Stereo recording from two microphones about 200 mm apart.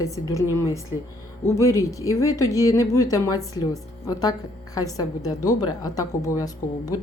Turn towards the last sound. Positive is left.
turn(degrees=15)  # may be behind; listen again after turning